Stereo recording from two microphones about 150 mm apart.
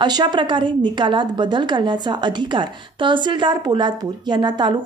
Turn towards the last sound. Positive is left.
turn(degrees=-30)  # may be behind; listen again after turning